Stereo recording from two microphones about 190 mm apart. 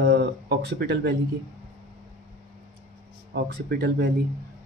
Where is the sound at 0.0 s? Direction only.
60° right (ahead or behind).